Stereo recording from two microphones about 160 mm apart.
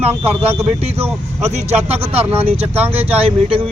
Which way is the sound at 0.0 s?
40° right (ahead or behind).